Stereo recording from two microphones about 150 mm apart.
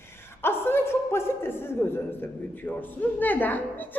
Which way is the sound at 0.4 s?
15° left (ahead or behind).